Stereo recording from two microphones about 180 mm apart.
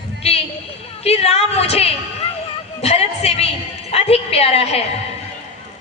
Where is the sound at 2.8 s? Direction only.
35° left (ahead or behind).